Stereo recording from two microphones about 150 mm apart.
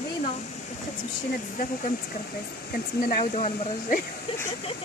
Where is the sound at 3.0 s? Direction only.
70° left (ahead or behind).